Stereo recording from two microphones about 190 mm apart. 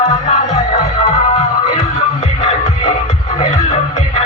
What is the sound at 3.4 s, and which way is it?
Music, 35° left (ahead or behind).